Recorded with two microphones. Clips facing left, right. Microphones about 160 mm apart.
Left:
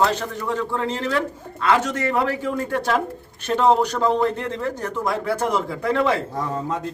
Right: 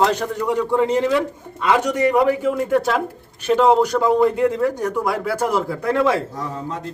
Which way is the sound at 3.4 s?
10° right (ahead or behind).